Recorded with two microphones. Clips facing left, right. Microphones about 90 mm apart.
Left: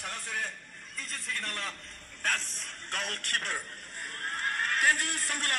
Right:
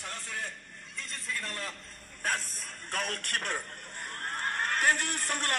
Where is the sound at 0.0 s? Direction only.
20° left (ahead or behind).